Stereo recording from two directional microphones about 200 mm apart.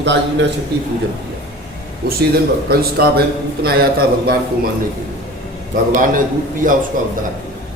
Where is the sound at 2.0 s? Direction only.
50° right (ahead or behind).